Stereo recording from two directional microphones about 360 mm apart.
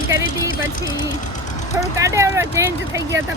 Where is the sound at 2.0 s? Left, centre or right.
Centre.